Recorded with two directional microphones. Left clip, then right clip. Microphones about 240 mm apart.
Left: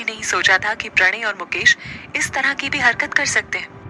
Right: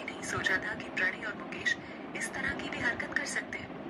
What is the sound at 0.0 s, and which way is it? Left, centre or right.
A man's voice, left.